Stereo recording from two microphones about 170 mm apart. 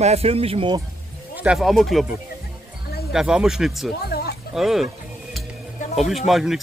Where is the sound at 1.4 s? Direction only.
5° right (ahead or behind).